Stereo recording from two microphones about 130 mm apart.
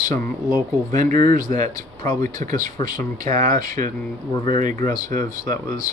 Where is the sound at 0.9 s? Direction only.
85° right.